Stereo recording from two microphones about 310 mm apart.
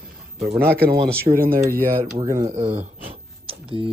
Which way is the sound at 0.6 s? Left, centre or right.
Right.